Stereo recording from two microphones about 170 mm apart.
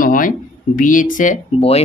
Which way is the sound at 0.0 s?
55° left (ahead or behind).